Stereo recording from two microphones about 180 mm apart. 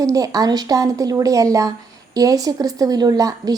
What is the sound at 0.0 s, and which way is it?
A woman's voice, 20° right (ahead or behind).